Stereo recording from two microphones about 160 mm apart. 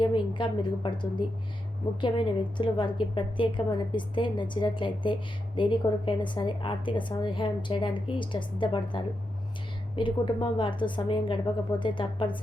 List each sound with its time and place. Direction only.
0.0 s a woman's voice: 30° left (ahead or behind)